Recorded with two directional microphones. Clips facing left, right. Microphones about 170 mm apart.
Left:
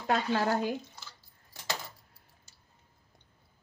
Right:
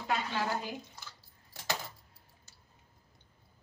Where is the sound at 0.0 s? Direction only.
55° left (ahead or behind).